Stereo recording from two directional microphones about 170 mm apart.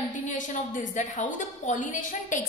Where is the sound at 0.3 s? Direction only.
50° left (ahead or behind).